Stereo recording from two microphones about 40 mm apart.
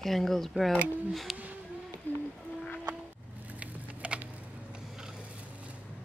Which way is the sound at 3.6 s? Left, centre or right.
Right.